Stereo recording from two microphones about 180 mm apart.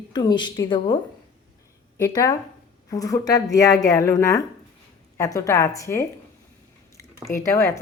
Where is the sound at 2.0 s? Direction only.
20° left (ahead or behind).